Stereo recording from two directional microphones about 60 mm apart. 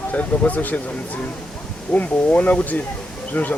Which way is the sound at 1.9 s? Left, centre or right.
Left.